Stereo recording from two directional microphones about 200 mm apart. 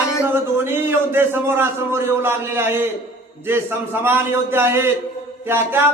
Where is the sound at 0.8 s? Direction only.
10° right (ahead or behind).